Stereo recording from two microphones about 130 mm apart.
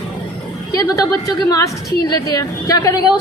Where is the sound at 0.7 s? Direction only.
30° left (ahead or behind).